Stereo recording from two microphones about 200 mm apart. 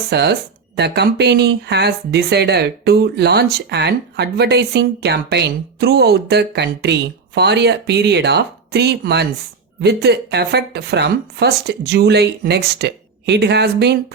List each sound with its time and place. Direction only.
0.1 s speech: 55° right (ahead or behind)